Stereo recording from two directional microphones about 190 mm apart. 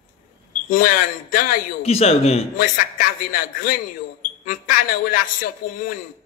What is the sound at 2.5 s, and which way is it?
A man's voice, 45° left (ahead or behind).